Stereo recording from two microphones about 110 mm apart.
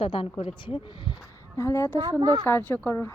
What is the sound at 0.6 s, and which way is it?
Speech, 45° left (ahead or behind).